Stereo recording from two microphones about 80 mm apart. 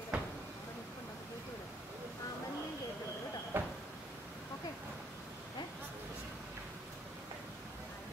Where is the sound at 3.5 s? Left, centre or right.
Right.